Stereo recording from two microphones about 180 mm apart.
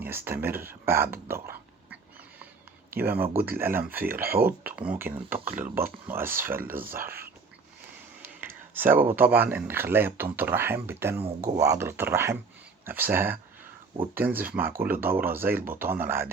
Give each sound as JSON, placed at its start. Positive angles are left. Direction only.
{"t": 0.0, "sound": "speech", "side_deg": -10}
{"t": 4.2, "sound": "speech", "side_deg": -55}
{"t": 4.4, "sound": "speech", "side_deg": -10}
{"t": 8.7, "sound": "speech", "side_deg": -10}